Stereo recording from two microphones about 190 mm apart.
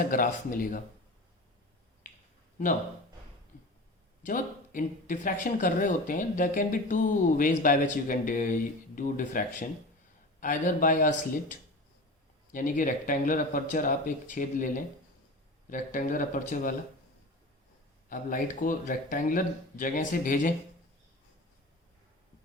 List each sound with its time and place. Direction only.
0.1 s speech: 45° left (ahead or behind)
4.2 s speech: 45° left (ahead or behind)
15.7 s speech: 45° left (ahead or behind)
18.1 s speech: 45° left (ahead or behind)